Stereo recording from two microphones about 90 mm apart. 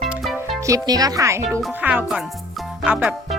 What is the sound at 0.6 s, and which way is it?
Music, 40° right (ahead or behind).